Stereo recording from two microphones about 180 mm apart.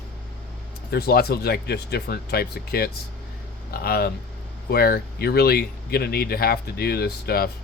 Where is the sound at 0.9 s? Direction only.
60° left (ahead or behind).